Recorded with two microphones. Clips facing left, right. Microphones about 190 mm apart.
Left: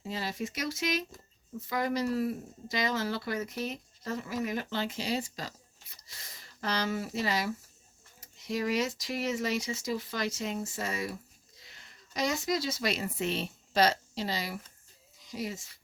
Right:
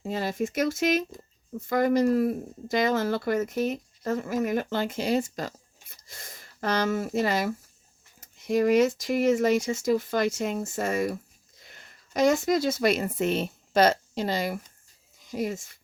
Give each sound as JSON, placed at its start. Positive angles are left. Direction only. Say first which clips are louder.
{"t": 0.0, "sound": "speech", "louder": "right 7 dB", "side_deg": -50}